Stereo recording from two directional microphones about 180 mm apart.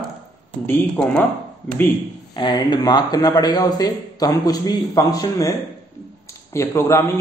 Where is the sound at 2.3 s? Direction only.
25° left (ahead or behind).